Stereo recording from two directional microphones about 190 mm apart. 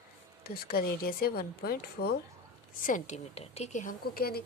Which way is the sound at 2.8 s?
45° left (ahead or behind).